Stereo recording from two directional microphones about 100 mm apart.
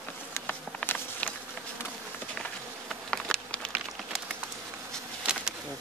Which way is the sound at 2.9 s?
10° left (ahead or behind).